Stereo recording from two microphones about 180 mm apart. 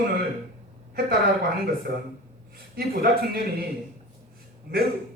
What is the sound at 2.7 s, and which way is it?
Speech, 55° right (ahead or behind).